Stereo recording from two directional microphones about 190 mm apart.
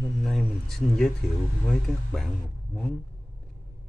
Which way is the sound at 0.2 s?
Centre (ahead or behind).